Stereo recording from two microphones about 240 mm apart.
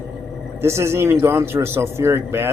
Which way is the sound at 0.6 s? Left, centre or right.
Centre.